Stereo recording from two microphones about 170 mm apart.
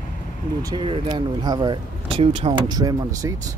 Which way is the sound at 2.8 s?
25° right (ahead or behind).